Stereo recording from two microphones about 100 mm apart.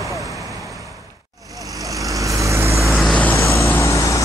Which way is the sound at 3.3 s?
30° left (ahead or behind).